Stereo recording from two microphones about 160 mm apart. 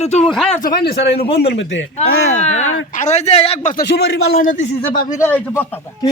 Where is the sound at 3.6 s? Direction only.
80° left; by 4.7 s 55° left (ahead or behind).